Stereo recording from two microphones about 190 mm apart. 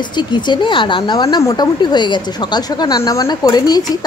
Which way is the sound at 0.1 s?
25° left (ahead or behind).